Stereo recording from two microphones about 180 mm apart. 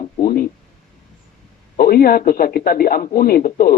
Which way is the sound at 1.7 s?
55° left (ahead or behind).